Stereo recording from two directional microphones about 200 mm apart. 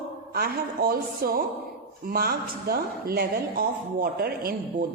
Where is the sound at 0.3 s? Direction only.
50° right (ahead or behind).